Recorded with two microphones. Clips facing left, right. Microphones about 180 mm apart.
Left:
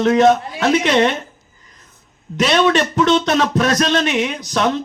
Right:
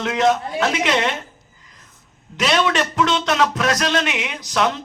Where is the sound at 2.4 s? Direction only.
35° left (ahead or behind).